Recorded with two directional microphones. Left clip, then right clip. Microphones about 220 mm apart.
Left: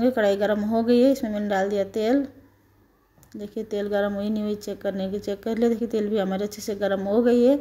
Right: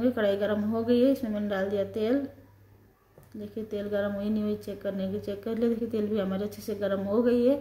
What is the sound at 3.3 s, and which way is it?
Speech, 40° left (ahead or behind).